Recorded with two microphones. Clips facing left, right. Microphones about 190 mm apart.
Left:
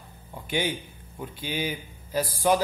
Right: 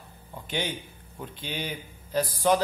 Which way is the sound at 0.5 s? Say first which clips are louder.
Left 4 dB; 10° left (ahead or behind).